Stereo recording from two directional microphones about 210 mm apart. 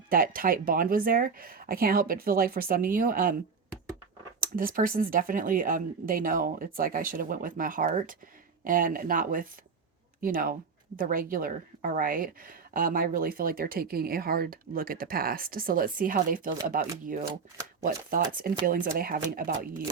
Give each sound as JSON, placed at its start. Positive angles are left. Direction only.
{"t": 0.1, "sound": "speech", "side_deg": -45}
{"t": 4.4, "sound": "speech", "side_deg": -40}
{"t": 18.1, "sound": "speech", "side_deg": -40}